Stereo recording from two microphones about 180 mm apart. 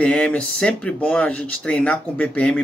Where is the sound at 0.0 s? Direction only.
5° left (ahead or behind).